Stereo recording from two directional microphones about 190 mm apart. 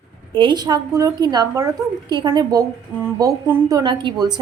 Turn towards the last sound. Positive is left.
turn(degrees=-25)  # may be behind; listen again after turning